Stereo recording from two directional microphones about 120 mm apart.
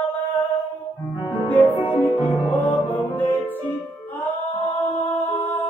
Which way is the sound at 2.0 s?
15° left (ahead or behind).